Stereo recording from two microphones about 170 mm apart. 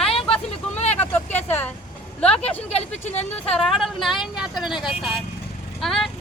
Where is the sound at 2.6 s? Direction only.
40° left (ahead or behind).